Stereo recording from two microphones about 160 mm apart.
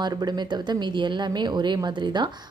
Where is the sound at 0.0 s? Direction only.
25° right (ahead or behind).